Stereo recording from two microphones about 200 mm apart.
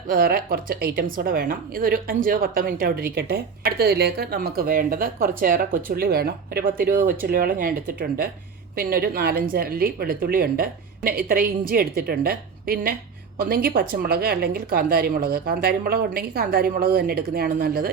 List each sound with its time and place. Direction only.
0.1 s speech: 45° right (ahead or behind)